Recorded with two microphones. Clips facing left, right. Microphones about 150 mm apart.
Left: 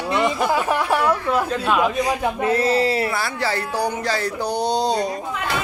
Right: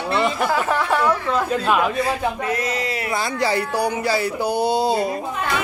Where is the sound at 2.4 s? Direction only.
30° left (ahead or behind).